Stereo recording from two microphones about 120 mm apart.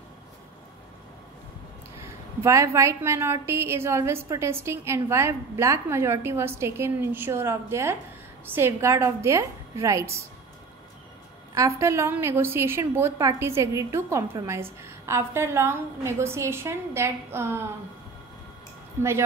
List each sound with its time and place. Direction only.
2.0 s a woman's voice: 25° right (ahead or behind)
11.5 s a woman's voice: 25° right (ahead or behind)
19.0 s a woman's voice: 20° right (ahead or behind)